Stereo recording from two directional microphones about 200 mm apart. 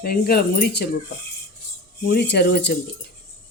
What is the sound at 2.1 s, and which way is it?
Speech, 55° left (ahead or behind).